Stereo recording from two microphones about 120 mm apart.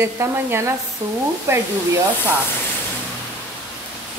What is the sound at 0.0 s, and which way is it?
Speech, 20° right (ahead or behind).